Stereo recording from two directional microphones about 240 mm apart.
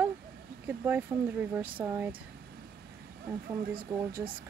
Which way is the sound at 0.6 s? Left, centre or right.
Centre.